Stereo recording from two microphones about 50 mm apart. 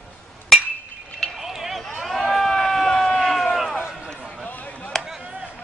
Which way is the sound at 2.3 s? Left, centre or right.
Centre.